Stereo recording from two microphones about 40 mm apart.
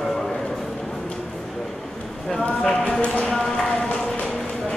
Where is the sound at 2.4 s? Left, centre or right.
Left.